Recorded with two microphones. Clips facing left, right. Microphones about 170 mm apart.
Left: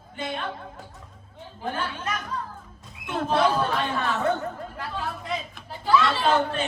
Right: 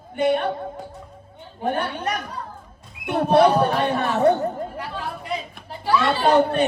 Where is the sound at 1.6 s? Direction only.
65° right (ahead or behind).